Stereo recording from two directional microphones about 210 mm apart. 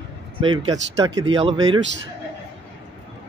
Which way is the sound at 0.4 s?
20° right (ahead or behind).